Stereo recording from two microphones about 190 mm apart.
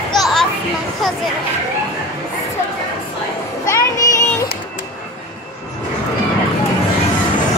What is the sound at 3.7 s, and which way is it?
Music, 15° left (ahead or behind).